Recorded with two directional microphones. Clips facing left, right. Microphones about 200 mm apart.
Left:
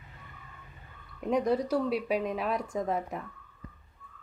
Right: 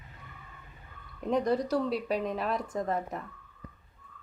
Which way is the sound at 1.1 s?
5° left (ahead or behind).